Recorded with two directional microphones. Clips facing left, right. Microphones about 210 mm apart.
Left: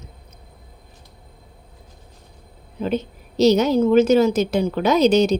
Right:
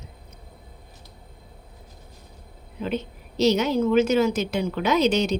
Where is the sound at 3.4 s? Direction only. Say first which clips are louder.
Left 5 dB; 40° left (ahead or behind).